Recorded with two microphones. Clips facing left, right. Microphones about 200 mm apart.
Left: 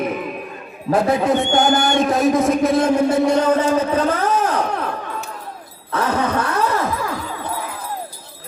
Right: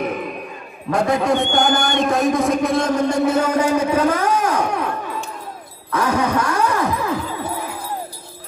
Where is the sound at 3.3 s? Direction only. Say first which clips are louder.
Left 1 dB; 10° right (ahead or behind).